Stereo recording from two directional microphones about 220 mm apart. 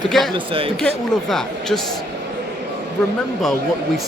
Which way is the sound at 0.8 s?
Centre (ahead or behind).